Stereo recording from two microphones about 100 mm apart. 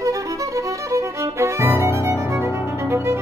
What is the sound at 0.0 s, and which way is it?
Violin, 30° right (ahead or behind).